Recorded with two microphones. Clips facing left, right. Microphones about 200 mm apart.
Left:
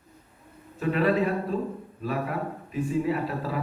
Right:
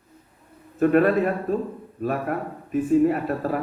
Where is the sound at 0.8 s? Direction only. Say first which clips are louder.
Right 6 dB; 55° right (ahead or behind).